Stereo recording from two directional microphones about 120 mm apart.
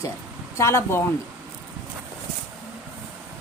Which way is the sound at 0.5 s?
25° left (ahead or behind).